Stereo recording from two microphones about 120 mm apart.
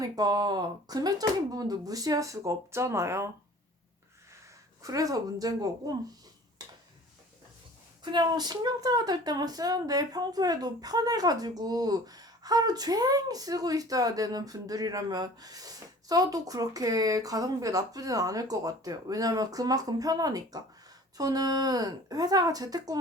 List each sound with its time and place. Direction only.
0.0 s speech: 35° right (ahead or behind)
4.8 s speech: 30° right (ahead or behind)
8.1 s speech: 35° right (ahead or behind)